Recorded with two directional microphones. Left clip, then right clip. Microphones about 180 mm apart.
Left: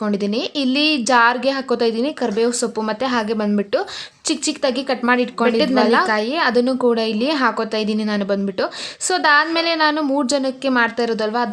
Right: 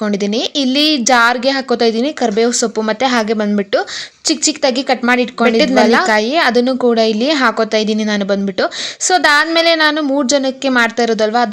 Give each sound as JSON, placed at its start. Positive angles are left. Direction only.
{"t": 0.0, "sound": "a woman's voice", "side_deg": -15}